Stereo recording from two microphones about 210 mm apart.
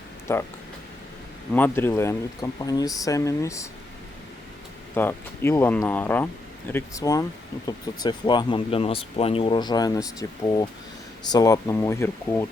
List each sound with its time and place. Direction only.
0.3 s speech: 10° left (ahead or behind)
1.5 s speech: 10° left (ahead or behind)
4.9 s speech: 10° left (ahead or behind)